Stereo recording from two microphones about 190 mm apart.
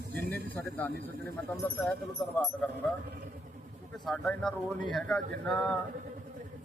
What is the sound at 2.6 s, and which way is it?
Speech, centre (ahead or behind).